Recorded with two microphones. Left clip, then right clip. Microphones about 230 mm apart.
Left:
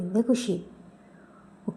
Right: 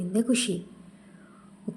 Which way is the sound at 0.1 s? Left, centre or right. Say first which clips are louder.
Left 1 dB; centre.